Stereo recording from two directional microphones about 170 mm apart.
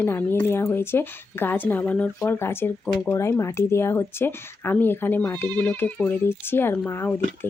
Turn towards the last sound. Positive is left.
turn(degrees=15)  # may be behind; listen again after turning